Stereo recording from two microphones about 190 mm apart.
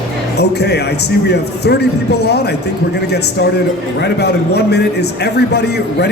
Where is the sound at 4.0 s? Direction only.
60° left (ahead or behind).